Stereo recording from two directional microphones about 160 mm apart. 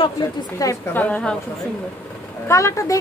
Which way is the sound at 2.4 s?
20° left (ahead or behind).